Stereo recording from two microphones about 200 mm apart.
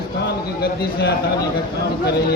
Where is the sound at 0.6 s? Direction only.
50° left (ahead or behind).